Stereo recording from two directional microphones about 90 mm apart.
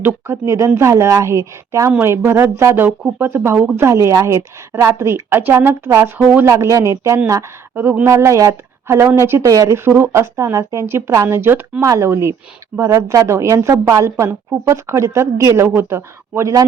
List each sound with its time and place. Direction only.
0.0 s a woman's voice: 30° right (ahead or behind)
6.1 s a woman's voice: 20° right (ahead or behind)
6.4 s speech: 30° right (ahead or behind)
7.8 s a woman's voice: 20° right (ahead or behind)
8.1 s a woman's voice: 35° right (ahead or behind)
9.4 s speech: 40° right (ahead or behind)
11.8 s speech: 35° right (ahead or behind)